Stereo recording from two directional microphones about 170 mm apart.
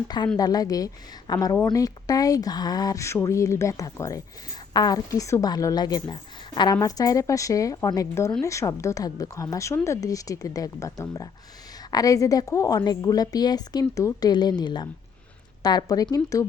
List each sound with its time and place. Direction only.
0.3 s speech: 20° left (ahead or behind)